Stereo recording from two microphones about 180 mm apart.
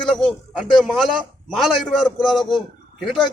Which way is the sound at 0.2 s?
Centre (ahead or behind).